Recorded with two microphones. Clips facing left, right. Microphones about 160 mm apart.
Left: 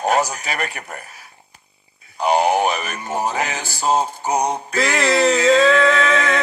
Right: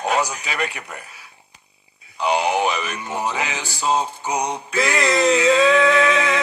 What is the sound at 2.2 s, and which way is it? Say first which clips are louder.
Music: left 3 dB; 45° left (ahead or behind).